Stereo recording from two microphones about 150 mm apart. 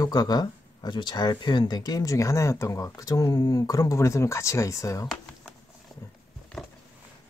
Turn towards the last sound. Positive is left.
turn(degrees=0)  # may be behind; listen again after turning